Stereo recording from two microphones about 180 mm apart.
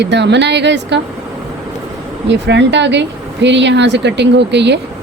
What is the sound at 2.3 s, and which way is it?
Speech, 80° right.